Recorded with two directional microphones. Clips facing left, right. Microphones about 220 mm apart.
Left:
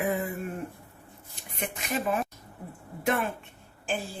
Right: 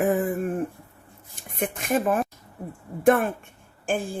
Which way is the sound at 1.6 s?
50° right (ahead or behind).